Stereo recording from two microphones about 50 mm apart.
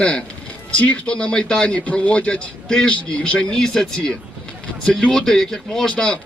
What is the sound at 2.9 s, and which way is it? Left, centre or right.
Speech, left.